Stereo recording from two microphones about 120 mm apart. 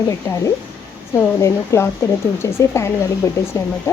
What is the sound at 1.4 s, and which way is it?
Speech, 25° left (ahead or behind).